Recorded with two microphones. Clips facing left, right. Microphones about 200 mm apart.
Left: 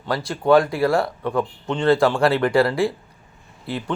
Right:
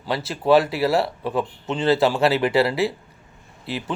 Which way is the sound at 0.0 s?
5° right (ahead or behind).